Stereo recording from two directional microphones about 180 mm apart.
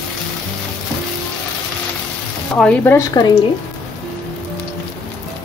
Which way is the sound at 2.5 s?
5° left (ahead or behind).